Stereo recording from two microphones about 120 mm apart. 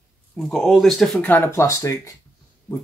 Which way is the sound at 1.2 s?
15° left (ahead or behind).